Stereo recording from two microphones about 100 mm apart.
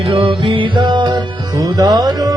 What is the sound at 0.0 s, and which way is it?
Music, 60° right (ahead or behind).